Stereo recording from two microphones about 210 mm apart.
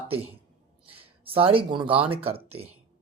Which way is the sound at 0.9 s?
25° right (ahead or behind).